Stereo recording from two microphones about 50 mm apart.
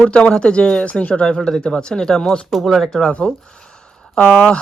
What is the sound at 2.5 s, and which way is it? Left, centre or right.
Speech, centre.